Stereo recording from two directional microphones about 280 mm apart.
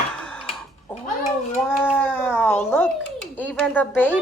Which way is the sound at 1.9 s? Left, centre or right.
Centre.